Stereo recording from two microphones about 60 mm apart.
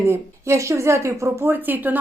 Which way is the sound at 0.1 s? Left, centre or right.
Right.